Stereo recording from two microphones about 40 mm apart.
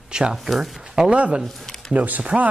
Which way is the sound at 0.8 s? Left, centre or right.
Centre.